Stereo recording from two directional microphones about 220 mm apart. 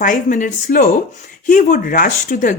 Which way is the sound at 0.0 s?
35° left (ahead or behind).